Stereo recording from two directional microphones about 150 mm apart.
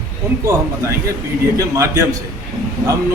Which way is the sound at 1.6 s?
20° right (ahead or behind).